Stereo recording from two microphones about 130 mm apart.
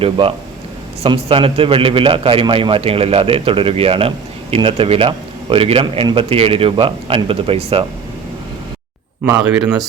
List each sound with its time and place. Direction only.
0.0 s speech: 45° right (ahead or behind)